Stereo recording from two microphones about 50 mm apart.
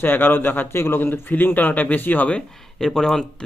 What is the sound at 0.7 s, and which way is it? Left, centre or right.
A man's voice, left.